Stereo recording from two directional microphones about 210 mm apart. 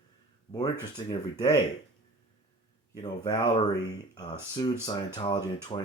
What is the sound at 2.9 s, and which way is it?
Speech, 20° left (ahead or behind).